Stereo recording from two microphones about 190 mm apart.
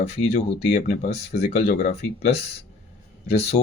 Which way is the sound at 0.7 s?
50° left (ahead or behind).